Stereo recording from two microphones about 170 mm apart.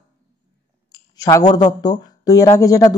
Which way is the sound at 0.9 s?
20° left (ahead or behind).